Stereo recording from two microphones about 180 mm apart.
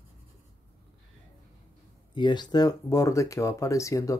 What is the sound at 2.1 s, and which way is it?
Speech, 25° left (ahead or behind).